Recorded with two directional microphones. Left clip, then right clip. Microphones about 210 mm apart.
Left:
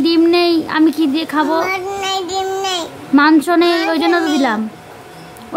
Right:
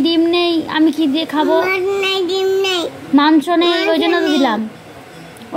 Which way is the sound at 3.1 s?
20° left (ahead or behind).